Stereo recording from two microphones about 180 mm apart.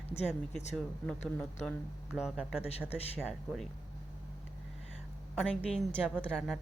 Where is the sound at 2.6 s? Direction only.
35° left (ahead or behind).